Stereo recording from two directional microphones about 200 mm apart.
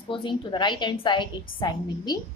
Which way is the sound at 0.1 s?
25° left (ahead or behind).